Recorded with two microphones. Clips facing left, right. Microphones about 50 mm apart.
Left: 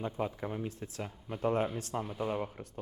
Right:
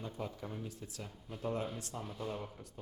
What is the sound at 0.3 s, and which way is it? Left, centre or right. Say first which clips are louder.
Speech: left 7 dB; left.